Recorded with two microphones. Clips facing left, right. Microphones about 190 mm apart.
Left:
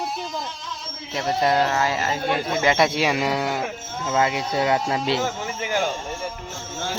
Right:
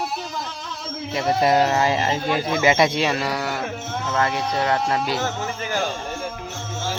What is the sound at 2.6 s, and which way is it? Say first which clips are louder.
Speech: right 1 dB; centre (ahead or behind).